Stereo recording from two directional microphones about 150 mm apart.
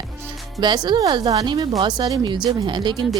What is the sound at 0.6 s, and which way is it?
Speech, 30° right (ahead or behind).